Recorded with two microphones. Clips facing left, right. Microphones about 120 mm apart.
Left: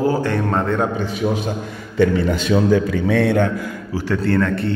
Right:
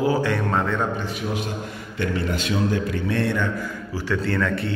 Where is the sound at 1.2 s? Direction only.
80° left.